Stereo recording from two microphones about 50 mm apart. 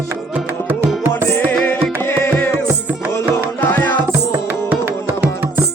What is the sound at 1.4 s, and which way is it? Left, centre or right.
Music, left.